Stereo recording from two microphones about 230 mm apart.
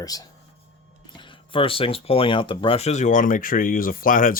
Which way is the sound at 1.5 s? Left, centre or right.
Left.